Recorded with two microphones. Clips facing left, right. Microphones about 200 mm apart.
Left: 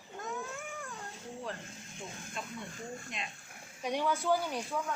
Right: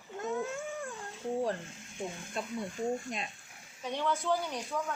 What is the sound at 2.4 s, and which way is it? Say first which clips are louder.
Speech: right 5 dB; 40° right (ahead or behind).